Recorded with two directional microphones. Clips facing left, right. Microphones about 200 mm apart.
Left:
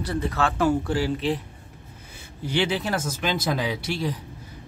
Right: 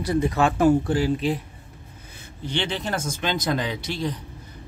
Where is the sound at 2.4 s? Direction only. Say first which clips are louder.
Left 3 dB; 5° left (ahead or behind).